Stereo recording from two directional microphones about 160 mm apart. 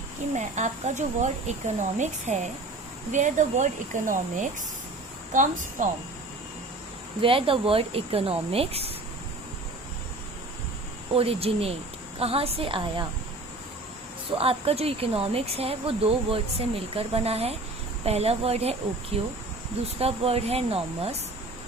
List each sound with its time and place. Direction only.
0.3 s speech: 45° right (ahead or behind)
7.2 s speech: 35° right (ahead or behind)
11.1 s speech: 35° right (ahead or behind)
14.3 s speech: 35° right (ahead or behind)